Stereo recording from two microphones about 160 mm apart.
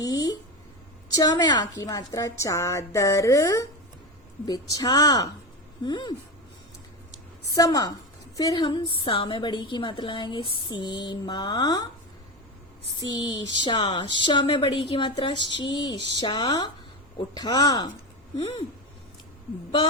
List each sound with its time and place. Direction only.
0.0 s a sound: 20° left (ahead or behind)
1.1 s a woman's voice: 20° left (ahead or behind)
7.5 s a woman's voice: 20° left (ahead or behind)
13.0 s a woman's voice: 20° left (ahead or behind)
18.3 s speech: 35° left (ahead or behind)